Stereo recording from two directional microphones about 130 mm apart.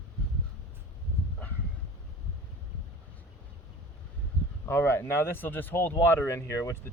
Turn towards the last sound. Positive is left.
turn(degrees=20)  # may be behind; listen again after turning